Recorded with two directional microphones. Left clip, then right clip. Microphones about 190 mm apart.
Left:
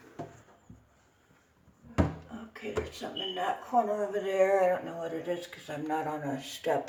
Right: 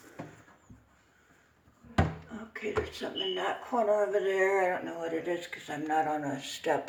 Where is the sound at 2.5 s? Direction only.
30° right (ahead or behind).